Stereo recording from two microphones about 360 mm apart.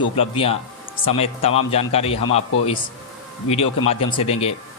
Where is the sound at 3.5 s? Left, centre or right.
Centre.